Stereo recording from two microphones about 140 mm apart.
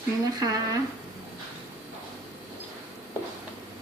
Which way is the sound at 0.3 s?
25° right (ahead or behind).